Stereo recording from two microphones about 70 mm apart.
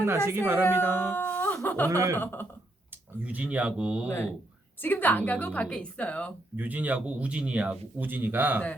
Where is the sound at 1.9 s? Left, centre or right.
Right.